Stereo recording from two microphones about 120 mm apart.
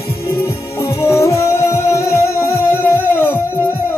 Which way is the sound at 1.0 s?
25° left (ahead or behind).